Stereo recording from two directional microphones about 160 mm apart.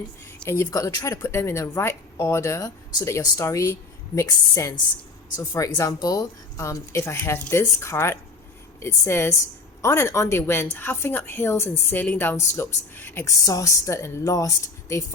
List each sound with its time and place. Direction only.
0.4 s speech: 15° left (ahead or behind)